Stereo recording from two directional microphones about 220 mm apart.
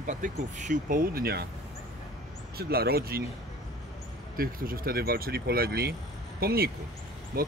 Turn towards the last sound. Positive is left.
turn(degrees=-40)  # may be behind; listen again after turning